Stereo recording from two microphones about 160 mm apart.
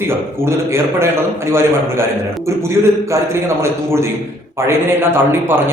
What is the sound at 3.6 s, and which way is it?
A man's voice, 15° right (ahead or behind).